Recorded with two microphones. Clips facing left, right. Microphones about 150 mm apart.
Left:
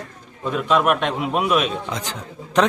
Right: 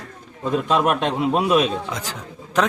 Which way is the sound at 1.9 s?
5° right (ahead or behind).